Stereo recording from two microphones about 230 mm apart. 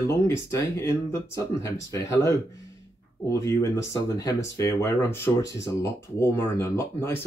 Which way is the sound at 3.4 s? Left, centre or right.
Centre.